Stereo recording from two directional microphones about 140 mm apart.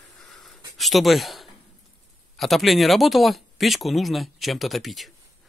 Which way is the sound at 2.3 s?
Centre (ahead or behind).